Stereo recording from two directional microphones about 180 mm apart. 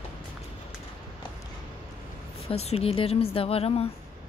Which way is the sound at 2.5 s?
35° left (ahead or behind).